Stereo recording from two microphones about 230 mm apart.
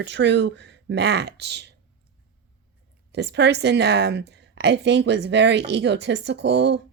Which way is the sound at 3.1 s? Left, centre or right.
Right.